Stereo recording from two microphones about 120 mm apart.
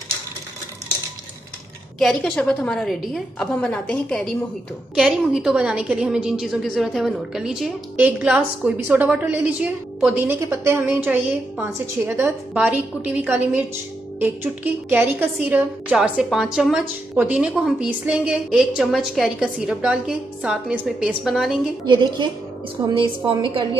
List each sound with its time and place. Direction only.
2.0 s a woman's voice: 5° left (ahead or behind)
4.9 s a woman's voice: 5° right (ahead or behind)
21.8 s a woman's voice: 40° right (ahead or behind)